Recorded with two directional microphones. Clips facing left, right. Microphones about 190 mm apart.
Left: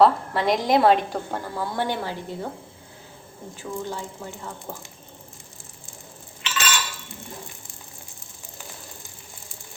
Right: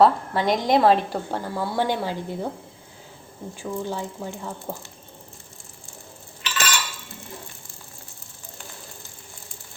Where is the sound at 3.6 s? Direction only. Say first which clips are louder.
Right 2 dB; 15° right (ahead or behind).